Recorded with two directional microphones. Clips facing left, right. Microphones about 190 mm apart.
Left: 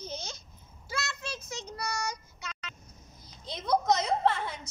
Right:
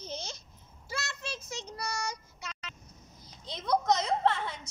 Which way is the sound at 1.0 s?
30° right (ahead or behind).